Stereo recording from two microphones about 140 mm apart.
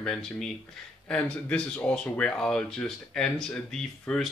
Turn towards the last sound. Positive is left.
turn(degrees=5)  # may be behind; listen again after turning